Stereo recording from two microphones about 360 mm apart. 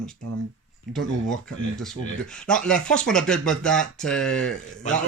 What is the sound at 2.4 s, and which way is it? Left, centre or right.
Speech, centre.